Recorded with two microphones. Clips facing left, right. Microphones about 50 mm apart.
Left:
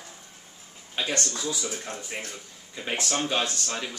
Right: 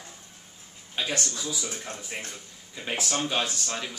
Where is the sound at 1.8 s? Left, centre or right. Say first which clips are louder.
Left 1 dB; centre.